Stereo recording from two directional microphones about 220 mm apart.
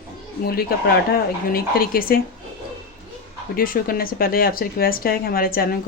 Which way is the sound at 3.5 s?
40° left (ahead or behind).